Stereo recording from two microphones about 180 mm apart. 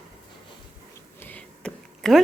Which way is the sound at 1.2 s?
10° left (ahead or behind).